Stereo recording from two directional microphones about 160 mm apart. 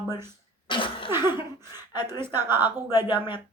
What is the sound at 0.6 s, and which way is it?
Cough, 30° left (ahead or behind).